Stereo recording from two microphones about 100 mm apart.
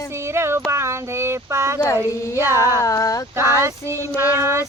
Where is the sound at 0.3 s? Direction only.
25° right (ahead or behind).